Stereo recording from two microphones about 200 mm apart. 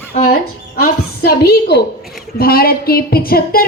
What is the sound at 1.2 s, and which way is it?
A woman's voice, 50° left (ahead or behind).